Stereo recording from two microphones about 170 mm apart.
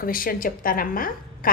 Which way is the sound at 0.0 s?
55° left (ahead or behind).